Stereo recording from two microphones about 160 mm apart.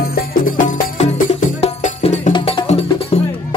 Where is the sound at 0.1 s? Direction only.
60° left (ahead or behind).